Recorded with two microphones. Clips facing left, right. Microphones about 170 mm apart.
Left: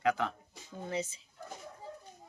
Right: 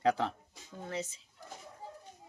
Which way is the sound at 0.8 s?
Centre (ahead or behind).